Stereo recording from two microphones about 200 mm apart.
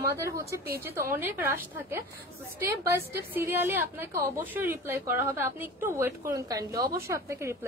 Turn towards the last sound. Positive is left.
turn(degrees=-15)  # may be behind; listen again after turning